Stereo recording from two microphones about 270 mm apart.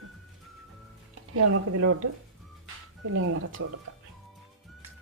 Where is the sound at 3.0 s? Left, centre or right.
Right.